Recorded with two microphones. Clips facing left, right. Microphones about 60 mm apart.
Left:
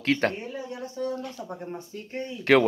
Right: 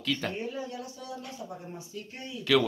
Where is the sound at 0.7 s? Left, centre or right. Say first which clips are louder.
Left 8 dB; left.